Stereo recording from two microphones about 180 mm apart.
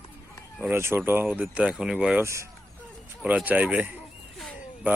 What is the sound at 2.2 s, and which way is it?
Speech, 15° right (ahead or behind).